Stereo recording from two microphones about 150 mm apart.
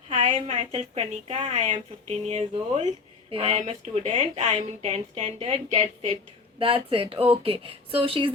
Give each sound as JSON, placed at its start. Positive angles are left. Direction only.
{"t": 0.1, "sound": "speech", "side_deg": -55}
{"t": 6.6, "sound": "speech", "side_deg": -35}